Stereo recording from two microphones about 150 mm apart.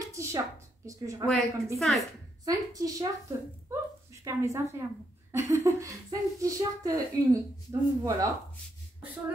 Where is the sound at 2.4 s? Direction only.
25° right (ahead or behind).